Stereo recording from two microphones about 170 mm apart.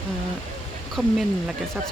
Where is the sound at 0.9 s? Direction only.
Centre (ahead or behind).